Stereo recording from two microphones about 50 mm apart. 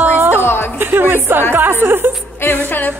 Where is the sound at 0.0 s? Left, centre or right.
Right.